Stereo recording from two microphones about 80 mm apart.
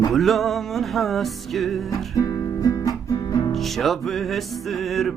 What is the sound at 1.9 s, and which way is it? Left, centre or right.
Music, left.